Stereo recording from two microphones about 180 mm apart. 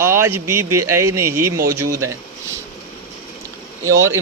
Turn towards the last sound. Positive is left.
turn(degrees=-15)  # may be behind; listen again after turning